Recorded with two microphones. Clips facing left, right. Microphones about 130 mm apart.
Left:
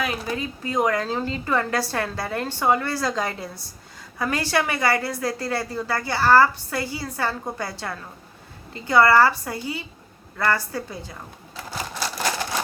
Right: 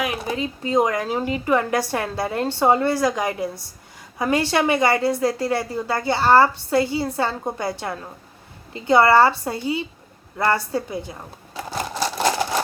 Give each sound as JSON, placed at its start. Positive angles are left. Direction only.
{"t": 0.0, "sound": "a woman's voice", "side_deg": -20}